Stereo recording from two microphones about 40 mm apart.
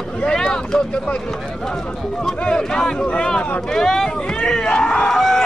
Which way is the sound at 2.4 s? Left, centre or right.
Centre.